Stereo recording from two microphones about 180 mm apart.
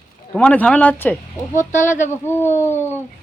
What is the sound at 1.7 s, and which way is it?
Speech, 45° left (ahead or behind).